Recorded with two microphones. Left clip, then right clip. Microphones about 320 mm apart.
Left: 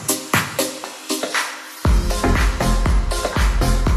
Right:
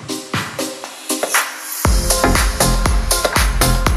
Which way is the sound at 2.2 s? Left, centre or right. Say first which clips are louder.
Right 4 dB; right.